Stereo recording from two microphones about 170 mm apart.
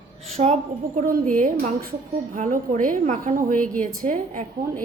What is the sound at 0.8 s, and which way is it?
Speech, 55° right (ahead or behind).